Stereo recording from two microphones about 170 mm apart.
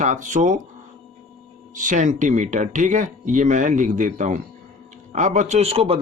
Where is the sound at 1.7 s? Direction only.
45° right (ahead or behind).